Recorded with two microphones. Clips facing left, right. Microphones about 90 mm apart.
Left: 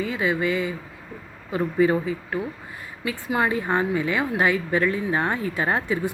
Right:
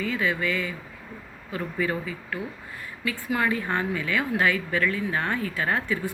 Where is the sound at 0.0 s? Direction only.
20° left (ahead or behind).